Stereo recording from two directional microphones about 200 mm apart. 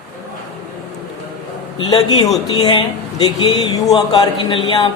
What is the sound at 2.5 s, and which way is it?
Speech, 20° left (ahead or behind).